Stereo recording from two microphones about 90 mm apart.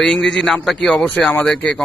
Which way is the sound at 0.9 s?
15° left (ahead or behind).